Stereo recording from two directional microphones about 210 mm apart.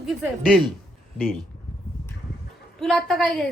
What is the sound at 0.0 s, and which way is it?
Speech, centre (ahead or behind).